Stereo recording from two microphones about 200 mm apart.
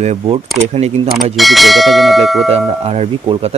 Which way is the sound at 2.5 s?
30° right (ahead or behind).